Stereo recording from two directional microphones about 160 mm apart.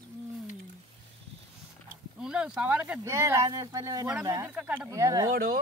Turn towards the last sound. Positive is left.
turn(degrees=-65)  # may be behind; listen again after turning